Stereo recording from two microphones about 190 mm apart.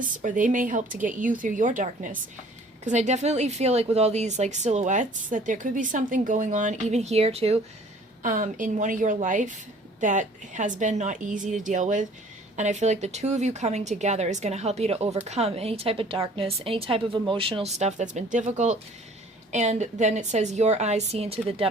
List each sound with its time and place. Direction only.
0.0 s a woman's voice: 45° right (ahead or behind)
8.2 s a woman's voice: 45° right (ahead or behind)